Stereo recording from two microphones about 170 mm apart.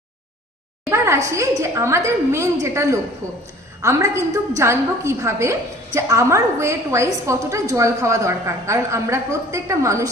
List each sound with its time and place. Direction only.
0.9 s a woman's voice: 15° right (ahead or behind)